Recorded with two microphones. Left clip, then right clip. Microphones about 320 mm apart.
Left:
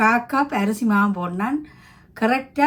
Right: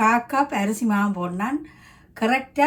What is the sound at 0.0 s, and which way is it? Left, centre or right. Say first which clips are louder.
Speech: left 1 dB; centre.